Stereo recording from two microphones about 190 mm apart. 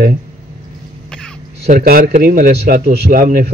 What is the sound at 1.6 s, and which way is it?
Speech, 50° right (ahead or behind).